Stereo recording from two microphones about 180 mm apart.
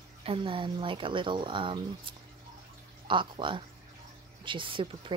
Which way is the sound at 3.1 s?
25° right (ahead or behind).